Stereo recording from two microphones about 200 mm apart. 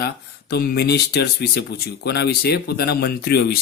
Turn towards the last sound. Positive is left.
turn(degrees=50)  # may be behind; listen again after turning